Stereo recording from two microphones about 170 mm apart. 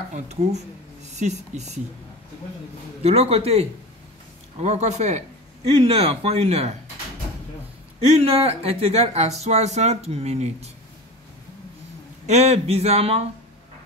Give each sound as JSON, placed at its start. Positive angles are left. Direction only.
{"t": 0.1, "sound": "speech", "side_deg": -40}
{"t": 3.0, "sound": "speech", "side_deg": -35}
{"t": 8.0, "sound": "speech", "side_deg": -35}
{"t": 12.3, "sound": "speech", "side_deg": -40}